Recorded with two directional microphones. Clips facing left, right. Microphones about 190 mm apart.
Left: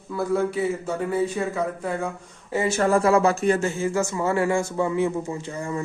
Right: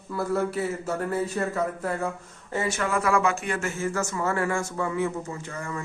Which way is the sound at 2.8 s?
35° left (ahead or behind).